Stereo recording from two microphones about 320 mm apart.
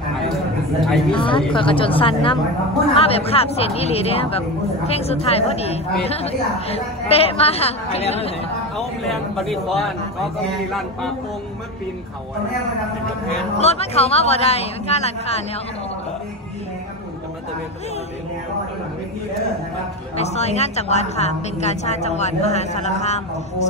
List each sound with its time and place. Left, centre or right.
0.7 s a man's voice: centre
1.1 s a woman's voice: centre
8.7 s a man's voice: centre
13.6 s a woman's voice: centre
20.2 s a woman's voice: centre